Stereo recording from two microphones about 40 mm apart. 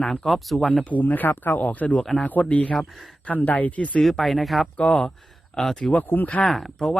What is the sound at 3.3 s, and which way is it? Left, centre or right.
Speech, left.